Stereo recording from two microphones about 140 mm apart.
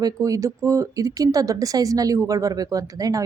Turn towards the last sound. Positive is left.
turn(degrees=-25)  # may be behind; listen again after turning